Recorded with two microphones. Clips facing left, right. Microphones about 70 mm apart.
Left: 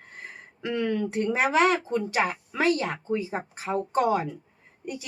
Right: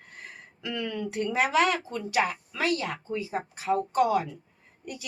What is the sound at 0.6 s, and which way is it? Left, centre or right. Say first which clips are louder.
Speech: left 6 dB; left.